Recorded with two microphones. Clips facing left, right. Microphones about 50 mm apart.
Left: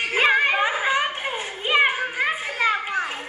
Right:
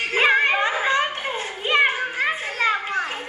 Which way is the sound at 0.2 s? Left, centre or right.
Centre.